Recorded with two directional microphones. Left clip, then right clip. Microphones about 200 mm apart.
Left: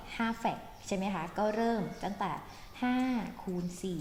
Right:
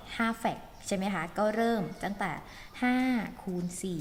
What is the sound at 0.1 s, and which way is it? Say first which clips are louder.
A woman's voice: right 3 dB; 20° right (ahead or behind).